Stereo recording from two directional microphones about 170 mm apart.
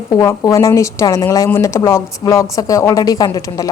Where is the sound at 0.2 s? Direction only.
20° left (ahead or behind).